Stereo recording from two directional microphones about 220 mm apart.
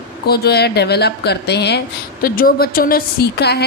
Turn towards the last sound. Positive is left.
turn(degrees=50)  # may be behind; listen again after turning